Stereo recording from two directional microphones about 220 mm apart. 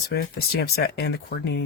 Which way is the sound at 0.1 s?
45° left (ahead or behind).